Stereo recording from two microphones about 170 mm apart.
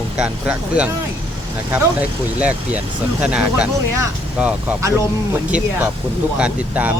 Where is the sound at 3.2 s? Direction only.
5° right (ahead or behind).